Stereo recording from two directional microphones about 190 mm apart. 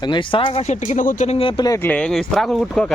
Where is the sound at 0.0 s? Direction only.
25° left (ahead or behind).